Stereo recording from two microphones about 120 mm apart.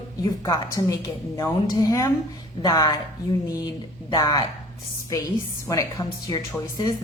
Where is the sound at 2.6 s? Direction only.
40° left (ahead or behind).